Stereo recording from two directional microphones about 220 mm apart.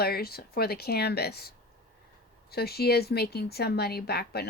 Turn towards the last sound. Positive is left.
turn(degrees=45)  # may be behind; listen again after turning